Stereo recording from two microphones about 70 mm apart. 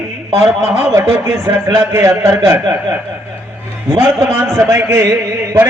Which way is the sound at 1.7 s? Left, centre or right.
Right.